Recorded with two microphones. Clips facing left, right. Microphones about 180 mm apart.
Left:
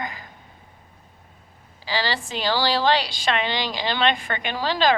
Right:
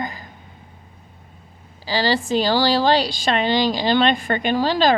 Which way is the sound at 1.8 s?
40° right (ahead or behind).